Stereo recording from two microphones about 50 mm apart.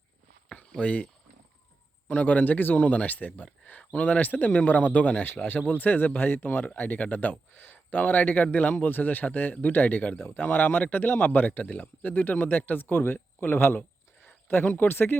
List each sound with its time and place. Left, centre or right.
0.8 s speech: left
2.0 s speech: left
2.9 s speech: left
10.2 s speech: left